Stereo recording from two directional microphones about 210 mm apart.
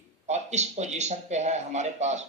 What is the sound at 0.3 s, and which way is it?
Speech, 30° right (ahead or behind).